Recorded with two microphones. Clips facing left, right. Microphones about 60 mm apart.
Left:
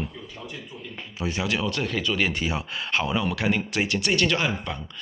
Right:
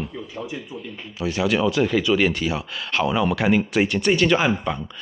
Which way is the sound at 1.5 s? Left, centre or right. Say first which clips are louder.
Right 10 dB; centre.